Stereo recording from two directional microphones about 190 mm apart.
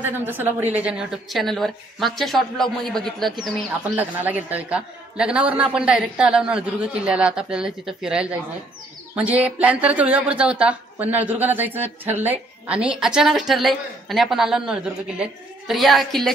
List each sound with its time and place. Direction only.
0.0 s a man's voice: 10° right (ahead or behind)
3.9 s a man's voice: 10° right (ahead or behind)